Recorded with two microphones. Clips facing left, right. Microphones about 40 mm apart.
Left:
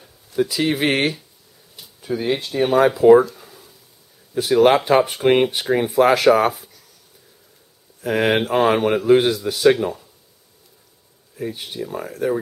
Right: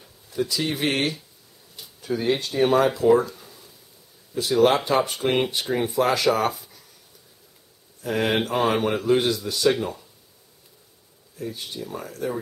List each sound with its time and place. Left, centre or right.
0.4 s speech: centre
2.0 s speech: centre
3.0 s speech: left
3.3 s a sound: centre
4.4 s speech: left
8.0 s speech: left
9.8 s speech: centre
11.3 s speech: left